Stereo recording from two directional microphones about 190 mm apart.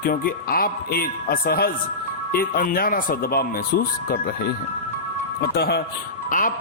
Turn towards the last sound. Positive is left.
turn(degrees=45)  # may be behind; listen again after turning